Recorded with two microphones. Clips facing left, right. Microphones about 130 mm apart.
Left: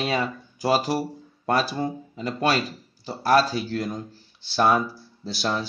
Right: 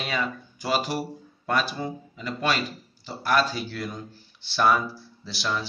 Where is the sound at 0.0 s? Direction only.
30° left (ahead or behind).